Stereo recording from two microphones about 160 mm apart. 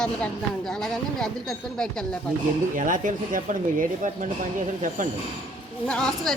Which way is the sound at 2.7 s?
55° right (ahead or behind).